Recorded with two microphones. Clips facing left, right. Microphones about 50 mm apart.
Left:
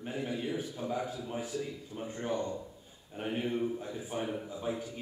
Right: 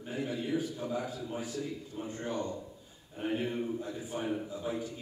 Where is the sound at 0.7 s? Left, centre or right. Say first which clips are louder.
Even; centre.